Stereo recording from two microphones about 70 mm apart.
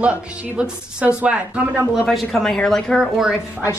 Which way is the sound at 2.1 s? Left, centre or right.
Centre.